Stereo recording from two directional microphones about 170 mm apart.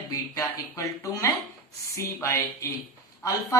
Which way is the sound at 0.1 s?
20° left (ahead or behind).